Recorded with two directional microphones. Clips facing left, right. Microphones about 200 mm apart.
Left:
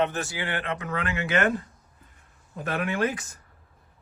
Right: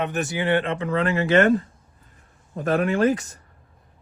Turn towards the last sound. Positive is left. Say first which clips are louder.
# right 7 dB
turn(degrees=-40)  # may be behind; listen again after turning